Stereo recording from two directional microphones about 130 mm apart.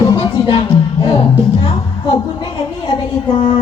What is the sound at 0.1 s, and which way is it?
Music, 35° left (ahead or behind).